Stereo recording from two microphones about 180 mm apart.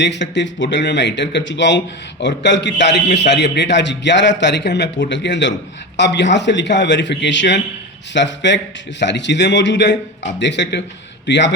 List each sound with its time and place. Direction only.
0.0 s a man's voice: 75° left (ahead or behind)